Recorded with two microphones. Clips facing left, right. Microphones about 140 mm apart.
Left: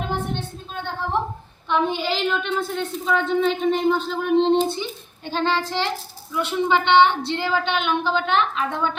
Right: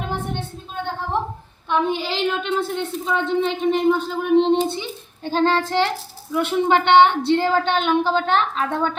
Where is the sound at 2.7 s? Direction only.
25° right (ahead or behind).